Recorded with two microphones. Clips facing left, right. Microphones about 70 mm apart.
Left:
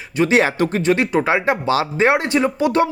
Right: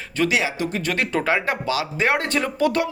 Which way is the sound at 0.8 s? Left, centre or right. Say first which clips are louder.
Left 5 dB; left.